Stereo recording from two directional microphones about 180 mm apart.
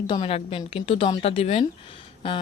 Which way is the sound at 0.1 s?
30° left (ahead or behind).